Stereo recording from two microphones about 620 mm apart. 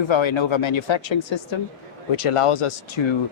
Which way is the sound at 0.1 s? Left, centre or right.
Left.